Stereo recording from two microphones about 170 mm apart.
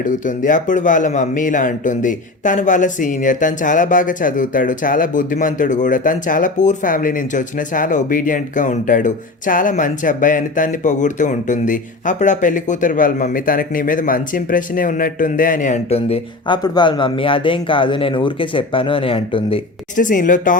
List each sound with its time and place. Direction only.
0.0 s speech: 50° left (ahead or behind); by 19.6 s 35° left (ahead or behind)
20.0 s speech: 50° left (ahead or behind)